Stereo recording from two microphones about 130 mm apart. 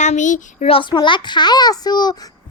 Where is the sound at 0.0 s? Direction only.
70° left (ahead or behind).